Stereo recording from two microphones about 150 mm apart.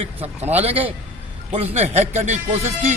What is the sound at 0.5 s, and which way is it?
A man's voice, 40° right (ahead or behind).